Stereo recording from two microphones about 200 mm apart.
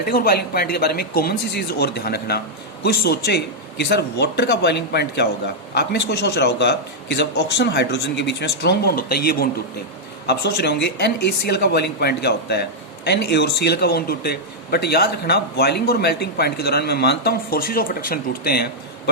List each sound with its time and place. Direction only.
0.1 s a man's voice: 50° left (ahead or behind)